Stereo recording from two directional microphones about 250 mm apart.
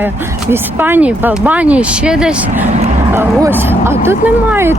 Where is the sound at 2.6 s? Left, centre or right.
Right.